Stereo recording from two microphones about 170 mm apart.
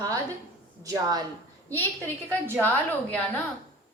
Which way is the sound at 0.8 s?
20° right (ahead or behind).